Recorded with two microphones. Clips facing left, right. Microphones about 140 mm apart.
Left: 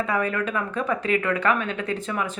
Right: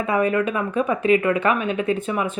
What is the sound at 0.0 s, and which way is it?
A woman's voice, 20° right (ahead or behind).